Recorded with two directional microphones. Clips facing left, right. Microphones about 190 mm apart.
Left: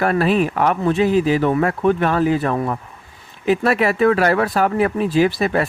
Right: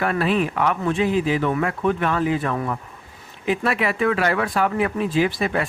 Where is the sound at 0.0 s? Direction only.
40° left (ahead or behind).